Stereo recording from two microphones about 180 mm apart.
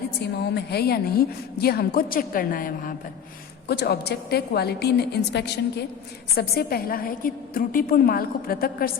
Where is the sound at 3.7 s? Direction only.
65° left (ahead or behind).